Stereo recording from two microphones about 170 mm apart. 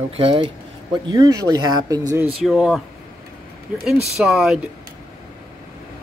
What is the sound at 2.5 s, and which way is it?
Speech, centre (ahead or behind).